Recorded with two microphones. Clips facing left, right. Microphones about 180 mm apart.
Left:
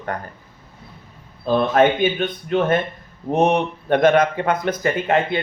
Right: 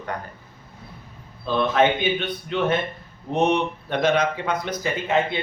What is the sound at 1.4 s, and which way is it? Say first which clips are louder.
A man's voice: left 4 dB; 45° left (ahead or behind).